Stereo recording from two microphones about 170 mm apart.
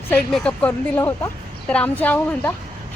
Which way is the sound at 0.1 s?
5° left (ahead or behind).